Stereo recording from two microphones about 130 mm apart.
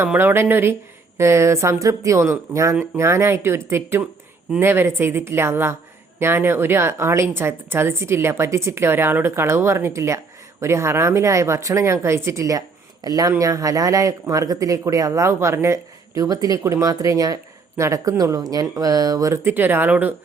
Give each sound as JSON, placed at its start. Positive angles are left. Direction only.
{"t": 0.0, "sound": "speech", "side_deg": -15}